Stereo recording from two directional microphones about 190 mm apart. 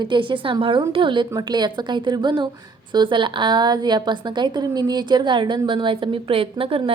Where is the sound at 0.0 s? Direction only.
25° right (ahead or behind).